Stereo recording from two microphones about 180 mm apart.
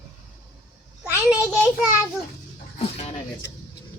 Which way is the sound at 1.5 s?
5° right (ahead or behind).